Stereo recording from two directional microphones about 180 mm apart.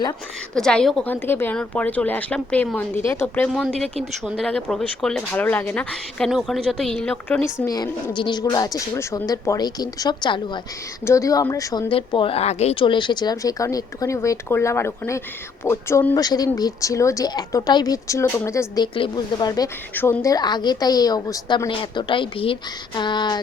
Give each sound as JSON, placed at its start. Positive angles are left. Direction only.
{"t": 0.5, "sound": "speech", "side_deg": 5}
{"t": 11.9, "sound": "speech", "side_deg": 30}
{"t": 18.8, "sound": "speech", "side_deg": 25}